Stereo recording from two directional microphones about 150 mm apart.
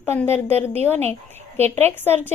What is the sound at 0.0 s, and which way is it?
Speech, 15° left (ahead or behind).